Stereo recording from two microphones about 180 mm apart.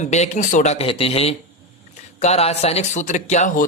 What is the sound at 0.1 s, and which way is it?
Speech, 40° left (ahead or behind).